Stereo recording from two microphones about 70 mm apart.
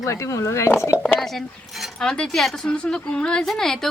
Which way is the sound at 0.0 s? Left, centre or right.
Left.